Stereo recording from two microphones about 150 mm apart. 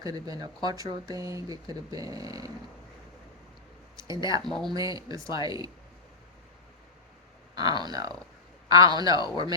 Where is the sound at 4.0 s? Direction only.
20° right (ahead or behind).